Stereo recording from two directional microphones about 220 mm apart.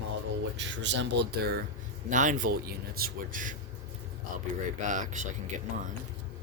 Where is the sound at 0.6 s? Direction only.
55° right (ahead or behind).